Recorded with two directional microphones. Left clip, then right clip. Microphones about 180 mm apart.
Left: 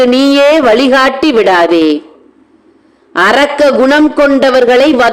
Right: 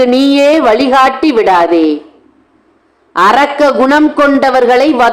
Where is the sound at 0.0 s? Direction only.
25° left (ahead or behind).